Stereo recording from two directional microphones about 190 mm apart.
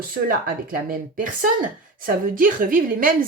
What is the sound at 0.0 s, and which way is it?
Speech, 50° right (ahead or behind).